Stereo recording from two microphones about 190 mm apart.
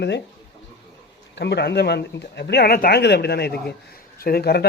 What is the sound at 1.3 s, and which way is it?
Speech, 65° left (ahead or behind).